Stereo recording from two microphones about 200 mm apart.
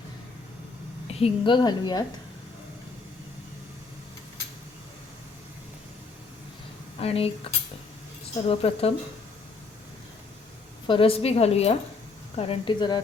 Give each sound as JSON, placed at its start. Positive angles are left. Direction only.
{"t": 1.0, "sound": "a woman's voice", "side_deg": 25}
{"t": 7.0, "sound": "a woman's voice", "side_deg": 30}
{"t": 10.8, "sound": "a woman's voice", "side_deg": 25}